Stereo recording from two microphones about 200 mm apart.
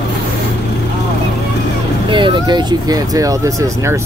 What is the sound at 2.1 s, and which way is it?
Speech, 25° right (ahead or behind).